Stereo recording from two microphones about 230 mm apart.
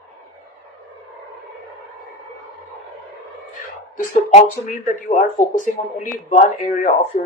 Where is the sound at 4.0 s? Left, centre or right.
Left.